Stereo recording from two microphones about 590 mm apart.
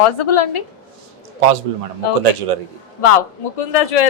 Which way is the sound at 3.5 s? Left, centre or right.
Left.